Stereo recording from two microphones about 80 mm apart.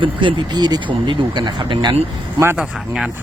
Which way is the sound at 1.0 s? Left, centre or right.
Right.